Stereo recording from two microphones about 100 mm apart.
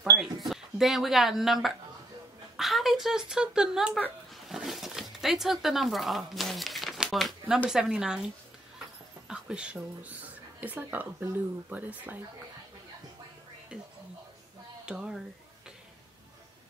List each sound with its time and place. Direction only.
0.5 s speech: centre (ahead or behind)
4.3 s dog: centre (ahead or behind)
5.2 s speech: 5° right (ahead or behind)
9.3 s speech: 10° right (ahead or behind)
14.9 s speech: 10° right (ahead or behind)